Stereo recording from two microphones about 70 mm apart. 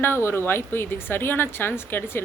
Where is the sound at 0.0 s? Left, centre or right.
Left.